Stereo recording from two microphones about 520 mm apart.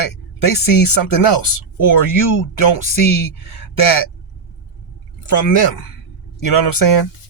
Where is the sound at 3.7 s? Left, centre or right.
Left.